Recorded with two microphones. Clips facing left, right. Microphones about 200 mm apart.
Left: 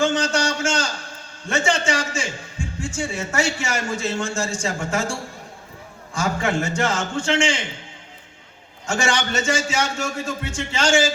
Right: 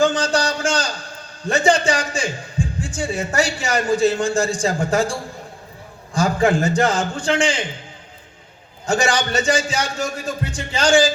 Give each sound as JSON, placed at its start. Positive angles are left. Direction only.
{"t": 0.0, "sound": "a sound", "side_deg": -35}
{"t": 1.5, "sound": "a man's voice", "side_deg": -35}
{"t": 6.1, "sound": "a man's voice", "side_deg": -35}
{"t": 8.9, "sound": "a man's voice", "side_deg": -35}